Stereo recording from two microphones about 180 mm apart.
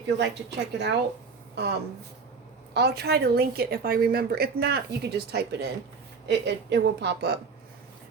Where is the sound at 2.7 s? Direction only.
65° right (ahead or behind).